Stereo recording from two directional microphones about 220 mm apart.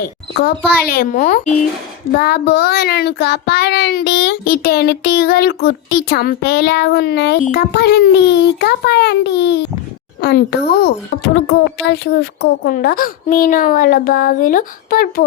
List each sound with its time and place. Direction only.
0.0 s a child's voice: 45° left (ahead or behind)
2.1 s child singing: 45° left (ahead or behind)
10.2 s a child's voice: 45° left (ahead or behind)